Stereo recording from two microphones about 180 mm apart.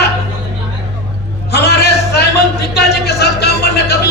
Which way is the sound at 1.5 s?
65° left (ahead or behind).